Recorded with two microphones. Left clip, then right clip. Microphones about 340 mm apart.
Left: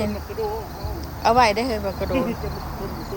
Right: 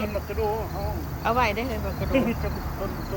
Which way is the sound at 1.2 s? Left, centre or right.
Centre.